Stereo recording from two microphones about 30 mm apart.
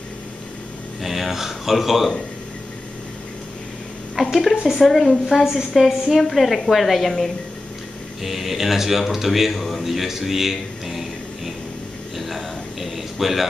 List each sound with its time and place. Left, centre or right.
1.0 s speech: centre
4.2 s speech: centre
8.2 s speech: centre
12.2 s a sound: centre